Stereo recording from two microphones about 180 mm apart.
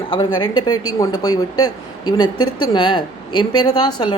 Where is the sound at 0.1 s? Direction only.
25° left (ahead or behind).